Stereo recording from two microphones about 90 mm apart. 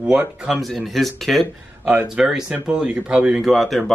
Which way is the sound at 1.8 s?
10° right (ahead or behind).